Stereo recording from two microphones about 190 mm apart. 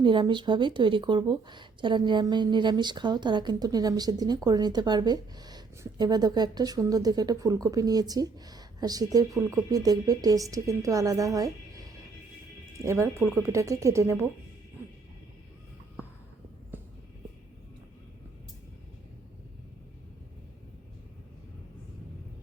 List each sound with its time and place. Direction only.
0.0 s speech: 25° right (ahead or behind)
12.7 s speech: 15° right (ahead or behind)
16.7 s music: 10° right (ahead or behind)